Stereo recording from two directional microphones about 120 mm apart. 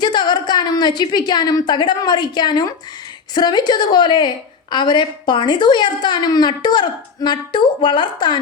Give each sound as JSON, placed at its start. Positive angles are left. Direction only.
{"t": 0.0, "sound": "a woman's voice", "side_deg": 40}